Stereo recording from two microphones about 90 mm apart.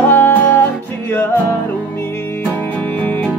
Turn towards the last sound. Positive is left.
turn(degrees=20)  # may be behind; listen again after turning